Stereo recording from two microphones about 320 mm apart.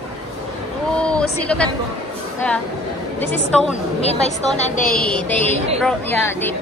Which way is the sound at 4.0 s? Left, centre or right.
Centre.